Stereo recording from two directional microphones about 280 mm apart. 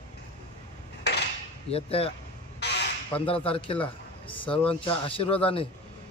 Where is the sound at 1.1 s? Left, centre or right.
Left.